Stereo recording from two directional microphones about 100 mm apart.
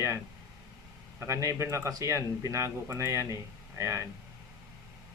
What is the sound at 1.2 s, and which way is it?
Speech, 30° right (ahead or behind).